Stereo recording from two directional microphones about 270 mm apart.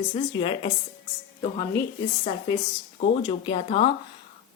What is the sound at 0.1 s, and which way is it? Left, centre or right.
Speech, centre.